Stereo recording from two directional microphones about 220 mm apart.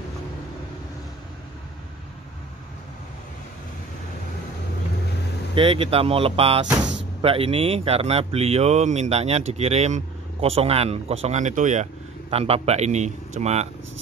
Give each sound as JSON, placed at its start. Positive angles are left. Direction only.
{"t": 5.5, "sound": "speech", "side_deg": -25}